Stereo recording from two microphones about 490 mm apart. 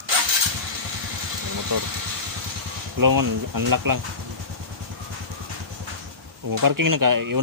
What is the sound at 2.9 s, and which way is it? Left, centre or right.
Speech, right.